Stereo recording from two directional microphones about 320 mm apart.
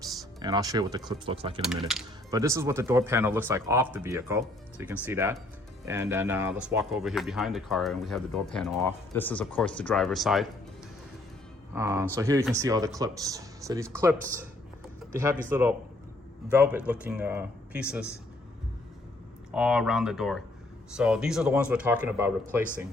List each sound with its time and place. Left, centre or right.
0.4 s speech: centre
1.6 s speech: centre
11.7 s speech: centre
19.5 s speech: centre